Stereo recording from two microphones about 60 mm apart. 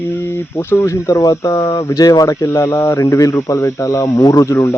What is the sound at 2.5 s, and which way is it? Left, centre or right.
Speech, left.